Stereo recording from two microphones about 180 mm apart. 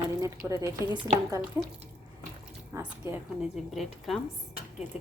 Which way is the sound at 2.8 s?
10° right (ahead or behind).